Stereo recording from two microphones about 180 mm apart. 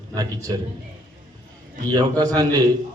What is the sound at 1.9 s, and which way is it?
Speech, 20° right (ahead or behind).